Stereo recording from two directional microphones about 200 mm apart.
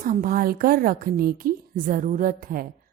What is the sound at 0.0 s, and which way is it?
A woman's voice, 45° right (ahead or behind).